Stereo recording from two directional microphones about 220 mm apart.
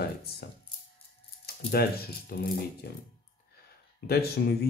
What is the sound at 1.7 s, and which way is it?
Speech, 45° left (ahead or behind).